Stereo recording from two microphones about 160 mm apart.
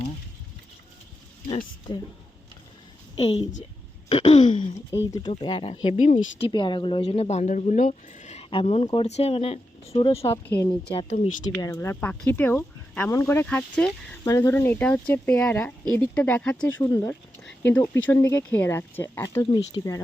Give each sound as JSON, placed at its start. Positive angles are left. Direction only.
{"t": 1.5, "sound": "speech", "side_deg": 35}
{"t": 3.2, "sound": "speech", "side_deg": 35}
{"t": 4.1, "sound": "a sound", "side_deg": 40}
{"t": 4.4, "sound": "speech", "side_deg": 30}
{"t": 5.9, "sound": "speech", "side_deg": 50}
{"t": 6.5, "sound": "speech", "side_deg": 30}
{"t": 7.0, "sound": "speech", "side_deg": 40}
{"t": 8.4, "sound": "speech", "side_deg": 35}
{"t": 10.4, "sound": "speech", "side_deg": 10}
{"t": 10.9, "sound": "speech", "side_deg": 40}
{"t": 11.6, "sound": "speech", "side_deg": 15}